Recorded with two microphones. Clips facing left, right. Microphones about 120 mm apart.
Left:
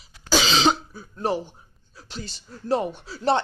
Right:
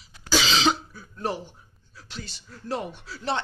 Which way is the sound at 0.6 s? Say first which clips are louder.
Left 3 dB; 30° left (ahead or behind).